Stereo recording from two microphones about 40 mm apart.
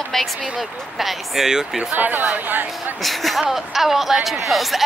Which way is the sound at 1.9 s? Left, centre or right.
Right.